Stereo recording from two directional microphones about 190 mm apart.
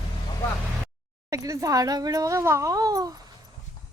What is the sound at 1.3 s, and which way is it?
Speech, 15° right (ahead or behind).